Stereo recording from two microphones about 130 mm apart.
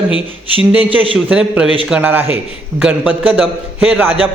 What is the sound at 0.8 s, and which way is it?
Speech, 40° right (ahead or behind).